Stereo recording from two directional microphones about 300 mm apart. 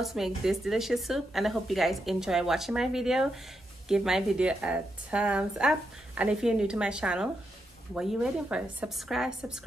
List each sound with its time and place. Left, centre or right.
0.0 s a woman's voice: centre